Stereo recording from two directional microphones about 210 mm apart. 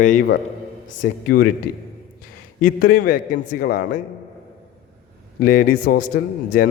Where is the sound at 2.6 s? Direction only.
40° left (ahead or behind).